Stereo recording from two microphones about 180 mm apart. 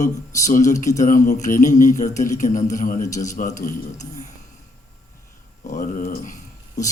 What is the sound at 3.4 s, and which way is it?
Speech, 45° left (ahead or behind).